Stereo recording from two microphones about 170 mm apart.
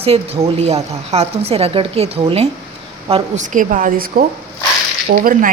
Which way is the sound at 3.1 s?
45° right (ahead or behind).